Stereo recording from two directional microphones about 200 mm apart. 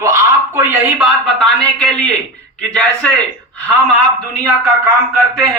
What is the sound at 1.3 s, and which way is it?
Speech, 5° left (ahead or behind).